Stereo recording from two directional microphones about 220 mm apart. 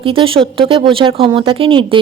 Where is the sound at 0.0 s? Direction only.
25° right (ahead or behind).